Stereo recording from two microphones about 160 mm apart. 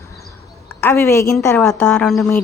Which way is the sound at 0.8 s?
15° left (ahead or behind).